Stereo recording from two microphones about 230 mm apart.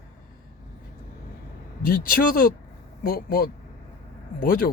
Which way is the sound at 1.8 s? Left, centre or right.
Left.